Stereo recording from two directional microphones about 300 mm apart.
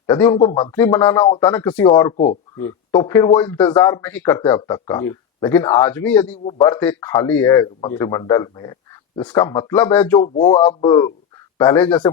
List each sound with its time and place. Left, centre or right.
0.1 s speech: centre
2.1 s speech: left
2.6 s speech: centre
6.4 s speech: centre
10.2 s speech: centre